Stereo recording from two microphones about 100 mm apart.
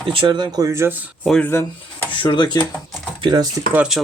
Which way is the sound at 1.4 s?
20° left (ahead or behind).